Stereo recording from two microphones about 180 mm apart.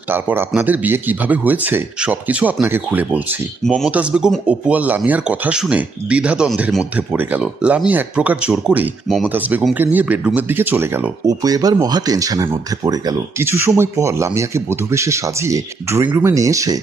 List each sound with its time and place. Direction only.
0.1 s speech: 10° right (ahead or behind)